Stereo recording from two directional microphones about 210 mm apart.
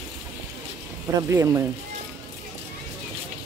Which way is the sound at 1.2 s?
15° right (ahead or behind).